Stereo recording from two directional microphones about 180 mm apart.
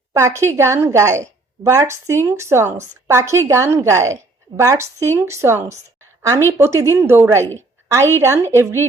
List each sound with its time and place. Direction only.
0.1 s a woman's voice: 15° right (ahead or behind)